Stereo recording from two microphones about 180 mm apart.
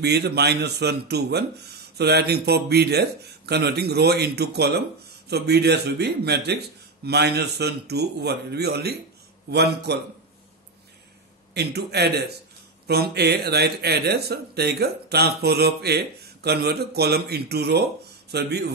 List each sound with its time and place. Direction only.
0.0 s a man's voice: 65° right (ahead or behind)
11.5 s a man's voice: 65° right (ahead or behind)